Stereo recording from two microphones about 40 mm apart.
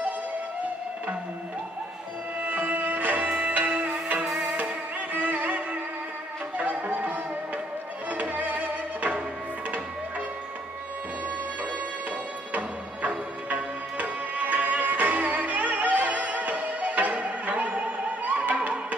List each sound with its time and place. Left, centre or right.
2.4 s music: right
13.5 s music: right